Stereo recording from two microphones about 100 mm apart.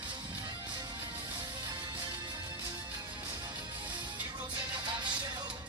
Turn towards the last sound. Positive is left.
turn(degrees=-50)  # may be behind; listen again after turning